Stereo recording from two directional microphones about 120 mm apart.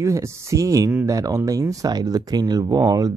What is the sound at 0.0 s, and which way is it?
Speech, 25° right (ahead or behind).